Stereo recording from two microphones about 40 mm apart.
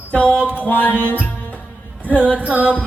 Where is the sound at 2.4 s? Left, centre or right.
Right.